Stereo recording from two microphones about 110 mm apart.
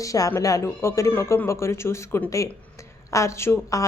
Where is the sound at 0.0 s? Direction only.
30° left (ahead or behind).